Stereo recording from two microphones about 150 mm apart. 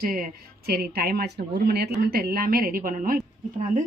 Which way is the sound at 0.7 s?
90° right.